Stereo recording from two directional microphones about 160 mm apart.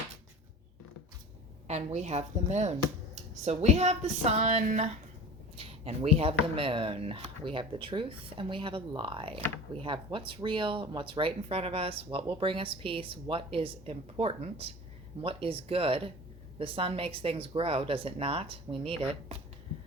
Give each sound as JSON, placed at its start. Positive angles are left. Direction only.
{"t": 1.6, "sound": "speech", "side_deg": -45}